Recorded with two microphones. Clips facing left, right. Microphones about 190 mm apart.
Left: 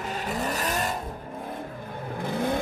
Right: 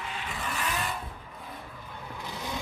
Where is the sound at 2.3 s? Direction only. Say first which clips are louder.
Left 11 dB; 55° left (ahead or behind).